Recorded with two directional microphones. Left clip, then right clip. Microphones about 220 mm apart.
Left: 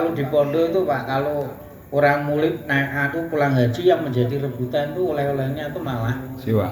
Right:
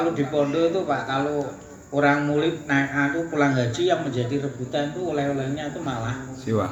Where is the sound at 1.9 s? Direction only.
50° left (ahead or behind).